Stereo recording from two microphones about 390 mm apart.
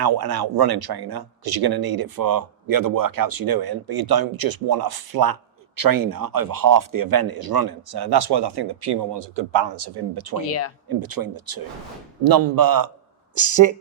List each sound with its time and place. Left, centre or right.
0.0 s speech: right
10.4 s speech: left
10.8 s speech: right